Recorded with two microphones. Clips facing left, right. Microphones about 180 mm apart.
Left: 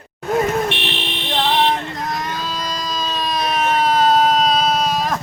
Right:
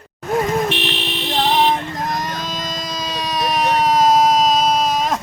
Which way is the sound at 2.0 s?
45° right (ahead or behind).